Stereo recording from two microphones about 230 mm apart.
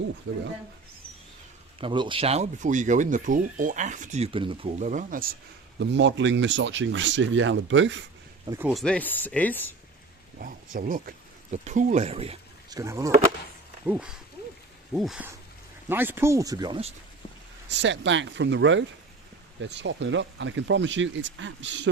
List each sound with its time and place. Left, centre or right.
1.8 s speech: right
5.8 s speech: right
8.4 s speech: centre
10.8 s speech: right
12.8 s speech: centre
17.7 s speech: right